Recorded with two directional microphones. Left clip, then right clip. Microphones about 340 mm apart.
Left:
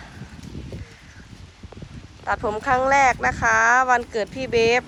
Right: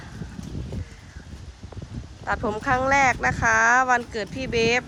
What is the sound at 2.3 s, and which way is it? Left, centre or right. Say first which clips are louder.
Speech: left 2 dB; centre.